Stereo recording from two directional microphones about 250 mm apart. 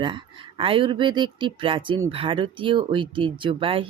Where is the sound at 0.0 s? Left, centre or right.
Centre.